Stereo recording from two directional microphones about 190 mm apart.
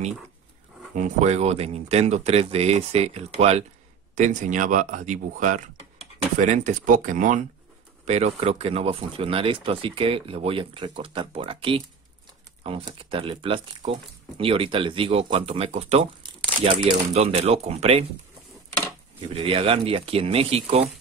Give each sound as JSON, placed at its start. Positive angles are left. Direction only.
{"t": 0.9, "sound": "speech", "side_deg": -40}
{"t": 19.2, "sound": "speech", "side_deg": -30}